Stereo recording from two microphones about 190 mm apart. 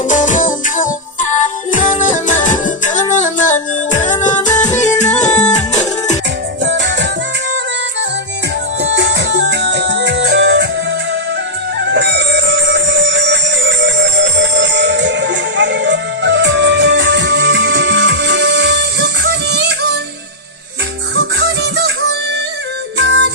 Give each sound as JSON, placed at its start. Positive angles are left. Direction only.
{"t": 0.1, "sound": "music", "side_deg": 40}
{"t": 4.7, "sound": "music", "side_deg": 15}
{"t": 4.9, "sound": "music", "side_deg": 40}
{"t": 6.6, "sound": "music", "side_deg": -70}
{"t": 8.8, "sound": "music", "side_deg": -70}
{"t": 11.8, "sound": "music", "side_deg": -65}
{"t": 21.2, "sound": "music", "side_deg": -65}
{"t": 23.0, "sound": "music", "side_deg": -70}